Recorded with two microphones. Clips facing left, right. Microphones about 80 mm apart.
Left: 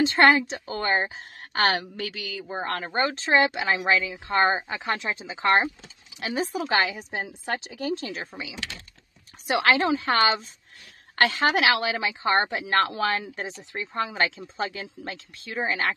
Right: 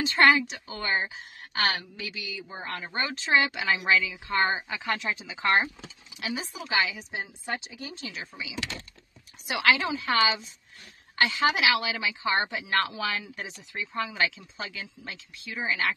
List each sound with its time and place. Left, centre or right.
0.0 s speech: left
6.2 s speech: left